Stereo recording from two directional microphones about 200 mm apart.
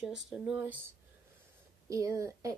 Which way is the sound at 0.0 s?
Centre (ahead or behind).